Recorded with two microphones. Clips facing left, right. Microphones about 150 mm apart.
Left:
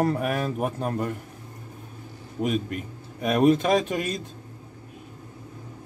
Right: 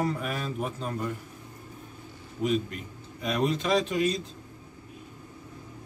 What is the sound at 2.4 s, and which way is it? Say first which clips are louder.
A man's voice: left 1 dB; 50° left (ahead or behind).